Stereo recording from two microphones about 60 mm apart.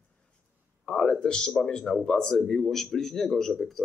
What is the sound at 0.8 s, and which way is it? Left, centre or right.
Speech, centre.